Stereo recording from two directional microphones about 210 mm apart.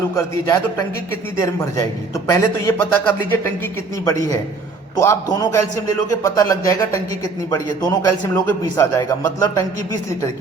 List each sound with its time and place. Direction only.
0.2 s a man's voice: 15° left (ahead or behind)